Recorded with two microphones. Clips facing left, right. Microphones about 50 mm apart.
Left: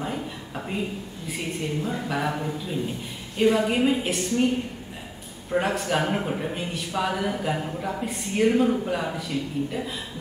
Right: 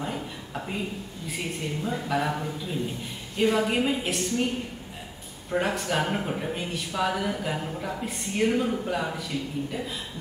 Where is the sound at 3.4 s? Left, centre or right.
Centre.